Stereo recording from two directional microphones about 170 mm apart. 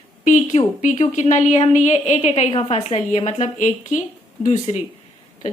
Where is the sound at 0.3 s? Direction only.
45° left (ahead or behind).